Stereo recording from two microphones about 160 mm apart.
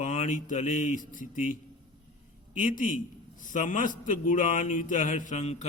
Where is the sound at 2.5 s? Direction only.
55° left (ahead or behind).